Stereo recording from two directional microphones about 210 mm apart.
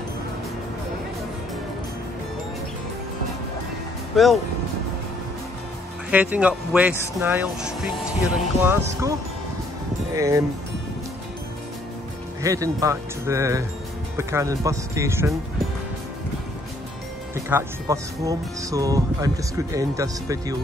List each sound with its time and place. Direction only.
4.1 s speech: centre (ahead or behind)
6.0 s speech: 5° right (ahead or behind)
10.1 s speech: 15° right (ahead or behind)
12.4 s speech: 15° right (ahead or behind)
17.5 s speech: 15° right (ahead or behind)